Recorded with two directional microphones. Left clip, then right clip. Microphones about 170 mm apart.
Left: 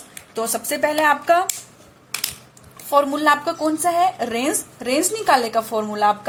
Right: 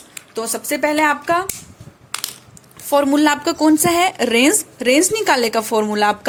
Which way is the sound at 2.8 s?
35° right (ahead or behind).